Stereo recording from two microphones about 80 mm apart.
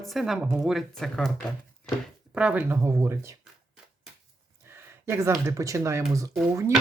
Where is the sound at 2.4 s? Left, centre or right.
Centre.